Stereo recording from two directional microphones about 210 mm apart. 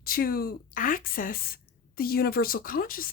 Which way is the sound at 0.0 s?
45° left (ahead or behind).